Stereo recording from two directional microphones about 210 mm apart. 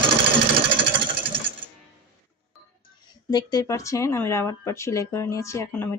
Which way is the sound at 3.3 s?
20° left (ahead or behind).